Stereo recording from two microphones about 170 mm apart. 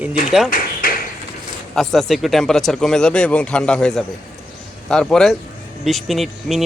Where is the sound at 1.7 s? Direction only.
Centre (ahead or behind).